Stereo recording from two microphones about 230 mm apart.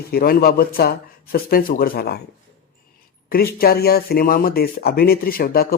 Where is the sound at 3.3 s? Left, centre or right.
Left.